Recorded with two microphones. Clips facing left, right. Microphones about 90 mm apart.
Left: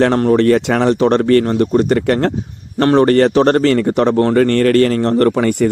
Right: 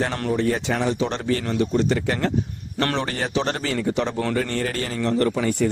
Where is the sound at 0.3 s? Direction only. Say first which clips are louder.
Left 10 dB; 65° left (ahead or behind).